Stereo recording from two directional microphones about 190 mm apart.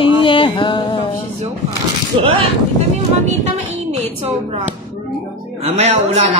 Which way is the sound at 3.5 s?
35° right (ahead or behind).